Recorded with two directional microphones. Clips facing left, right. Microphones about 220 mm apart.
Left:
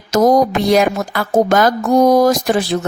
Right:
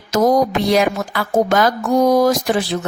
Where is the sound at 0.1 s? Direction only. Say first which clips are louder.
Left 3 dB; 45° left (ahead or behind).